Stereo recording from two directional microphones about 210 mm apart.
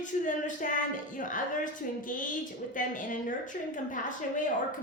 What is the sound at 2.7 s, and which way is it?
Speech, 40° left (ahead or behind).